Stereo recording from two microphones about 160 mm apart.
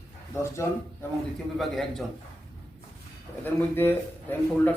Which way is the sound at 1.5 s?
Centre (ahead or behind).